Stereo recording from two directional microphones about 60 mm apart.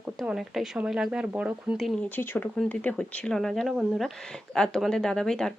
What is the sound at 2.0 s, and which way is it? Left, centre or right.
Speech, left.